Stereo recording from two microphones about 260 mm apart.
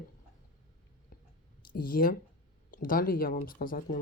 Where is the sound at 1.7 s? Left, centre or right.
Left.